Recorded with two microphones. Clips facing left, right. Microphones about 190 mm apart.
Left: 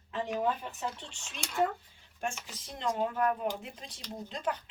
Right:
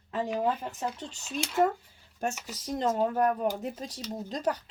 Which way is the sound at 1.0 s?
40° right (ahead or behind).